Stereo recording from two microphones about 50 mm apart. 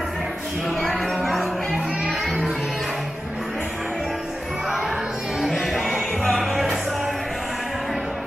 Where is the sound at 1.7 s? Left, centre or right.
Centre.